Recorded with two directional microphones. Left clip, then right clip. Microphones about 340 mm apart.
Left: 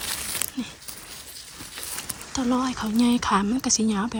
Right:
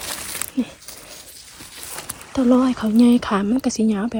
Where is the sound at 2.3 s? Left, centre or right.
Centre.